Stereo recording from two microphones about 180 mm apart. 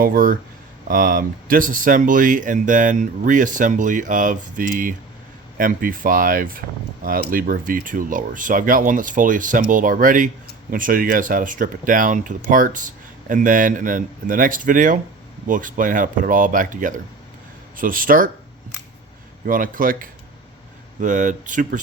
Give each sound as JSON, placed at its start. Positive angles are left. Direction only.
{"t": 0.0, "sound": "speech", "side_deg": -55}
{"t": 19.5, "sound": "speech", "side_deg": -50}